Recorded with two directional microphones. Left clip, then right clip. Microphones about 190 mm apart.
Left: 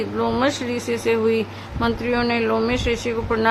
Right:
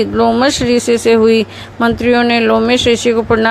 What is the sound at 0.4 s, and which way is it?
Speech, 35° right (ahead or behind).